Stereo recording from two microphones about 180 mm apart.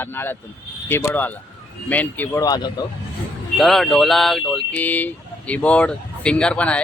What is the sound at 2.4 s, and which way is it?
Speech, 25° left (ahead or behind).